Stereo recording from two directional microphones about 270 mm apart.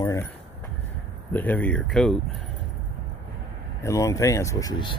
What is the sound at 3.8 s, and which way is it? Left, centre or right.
Speech, centre.